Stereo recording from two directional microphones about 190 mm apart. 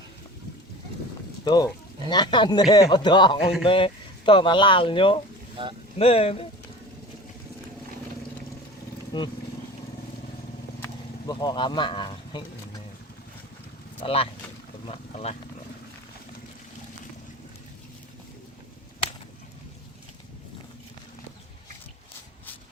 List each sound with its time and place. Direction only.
1.5 s a man's voice: 20° left (ahead or behind)
9.1 s a man's voice: 25° left (ahead or behind)
10.8 s vehicle: 15° left (ahead or behind)
11.3 s a man's voice: 25° left (ahead or behind)
14.0 s speech: 30° left (ahead or behind)